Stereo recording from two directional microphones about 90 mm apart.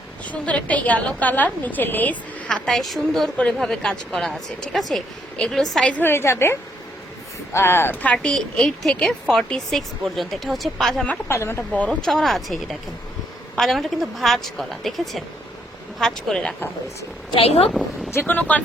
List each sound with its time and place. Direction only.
0.3 s a woman's voice: 15° left (ahead or behind)
2.5 s a woman's voice: 5° left (ahead or behind)
5.8 s a woman's voice: 20° left (ahead or behind)
8.0 s a woman's voice: 10° left (ahead or behind)
11.3 s a woman's voice: 30° left (ahead or behind)
11.9 s a woman's voice: 5° left (ahead or behind)
17.3 s a woman's voice: 90° left
18.1 s a woman's voice: 20° left (ahead or behind)